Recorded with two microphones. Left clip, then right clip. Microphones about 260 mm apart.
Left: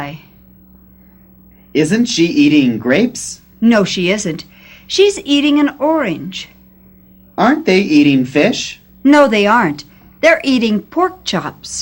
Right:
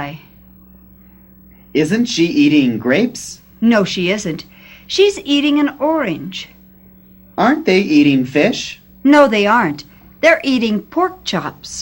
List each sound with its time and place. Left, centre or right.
1.7 s speech: right